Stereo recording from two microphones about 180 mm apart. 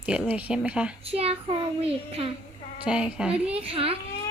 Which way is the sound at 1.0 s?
35° right (ahead or behind).